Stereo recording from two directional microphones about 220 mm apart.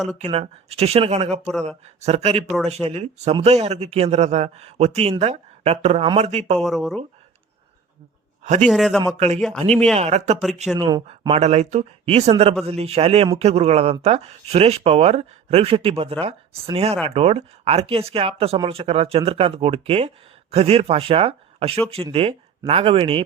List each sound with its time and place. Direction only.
0.3 s speech: 25° right (ahead or behind)
6.6 s speech: centre (ahead or behind)
8.6 s speech: centre (ahead or behind)
9.1 s a man's voice: 30° right (ahead or behind)
9.4 s speech: centre (ahead or behind)
9.9 s speech: 30° right (ahead or behind)
10.8 s speech: 20° right (ahead or behind)